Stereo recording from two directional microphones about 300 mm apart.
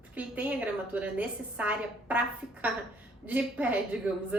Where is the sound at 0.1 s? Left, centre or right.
Centre.